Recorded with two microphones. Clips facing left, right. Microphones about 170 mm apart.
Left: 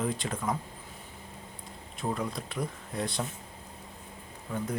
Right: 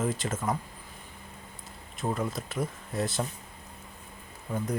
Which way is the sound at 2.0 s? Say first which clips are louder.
Right 2 dB; centre (ahead or behind).